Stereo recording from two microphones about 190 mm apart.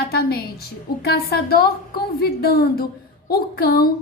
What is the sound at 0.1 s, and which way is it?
A woman's voice, 55° left (ahead or behind).